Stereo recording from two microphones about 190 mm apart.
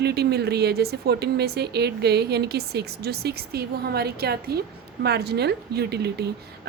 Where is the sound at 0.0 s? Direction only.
60° right (ahead or behind).